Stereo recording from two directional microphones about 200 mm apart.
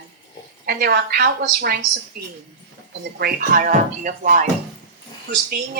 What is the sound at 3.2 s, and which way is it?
Speech, 45° right (ahead or behind).